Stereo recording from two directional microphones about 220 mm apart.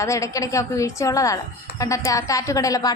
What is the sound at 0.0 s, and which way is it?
A woman's voice, 15° left (ahead or behind).